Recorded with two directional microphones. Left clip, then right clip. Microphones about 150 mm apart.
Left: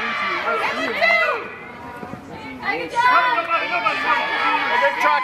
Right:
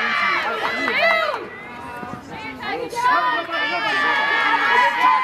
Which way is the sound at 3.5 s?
35° right (ahead or behind).